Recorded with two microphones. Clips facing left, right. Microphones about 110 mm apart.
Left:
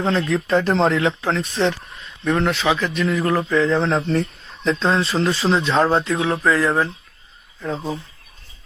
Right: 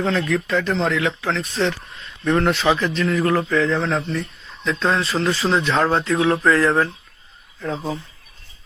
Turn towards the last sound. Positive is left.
turn(degrees=0)  # may be behind; listen again after turning